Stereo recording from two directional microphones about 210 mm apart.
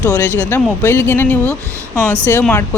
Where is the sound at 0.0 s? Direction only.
10° left (ahead or behind).